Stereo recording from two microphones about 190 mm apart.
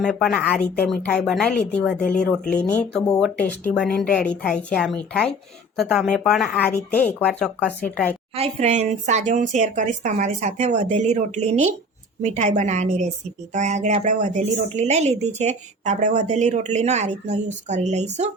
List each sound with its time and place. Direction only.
0.0 s speech: centre (ahead or behind)
8.4 s a woman's voice: 35° right (ahead or behind)